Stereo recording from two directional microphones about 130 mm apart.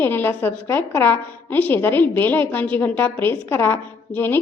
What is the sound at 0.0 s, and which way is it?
A woman's voice, 15° left (ahead or behind).